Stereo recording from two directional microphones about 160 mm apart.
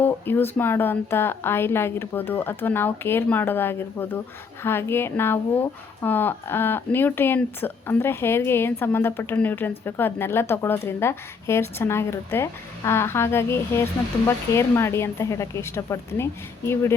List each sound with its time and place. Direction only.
0.0 s speech: 10° left (ahead or behind)